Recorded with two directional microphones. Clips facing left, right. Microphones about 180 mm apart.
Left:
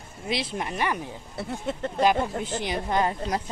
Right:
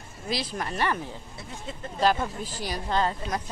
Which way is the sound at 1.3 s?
65° left (ahead or behind).